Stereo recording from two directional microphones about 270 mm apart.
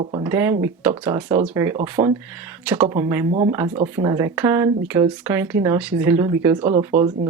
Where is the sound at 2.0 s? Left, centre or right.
Right.